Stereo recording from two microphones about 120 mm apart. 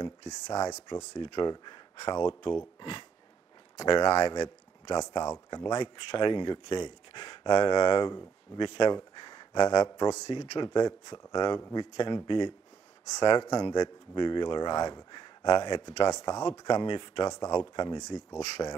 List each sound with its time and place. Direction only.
0.3 s speech: 30° left (ahead or behind)
1.2 s speech: 40° left (ahead or behind)
3.7 s speech: 35° left (ahead or behind)
18.6 s speech: 25° left (ahead or behind)